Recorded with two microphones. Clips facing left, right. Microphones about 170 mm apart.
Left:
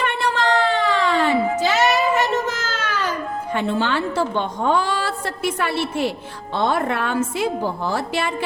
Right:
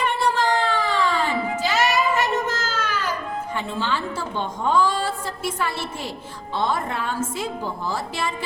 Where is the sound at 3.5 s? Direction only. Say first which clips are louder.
Left 6 dB; 65° left (ahead or behind).